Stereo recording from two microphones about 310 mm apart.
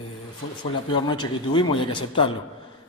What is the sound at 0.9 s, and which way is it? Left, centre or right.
A man's voice, centre.